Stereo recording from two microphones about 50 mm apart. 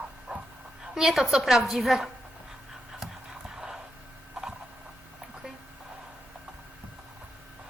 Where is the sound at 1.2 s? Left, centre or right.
Centre.